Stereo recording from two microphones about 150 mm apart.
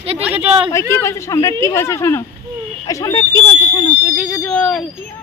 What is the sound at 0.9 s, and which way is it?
Speech, 20° left (ahead or behind).